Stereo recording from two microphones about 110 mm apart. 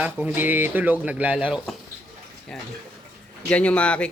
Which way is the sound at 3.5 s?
10° left (ahead or behind).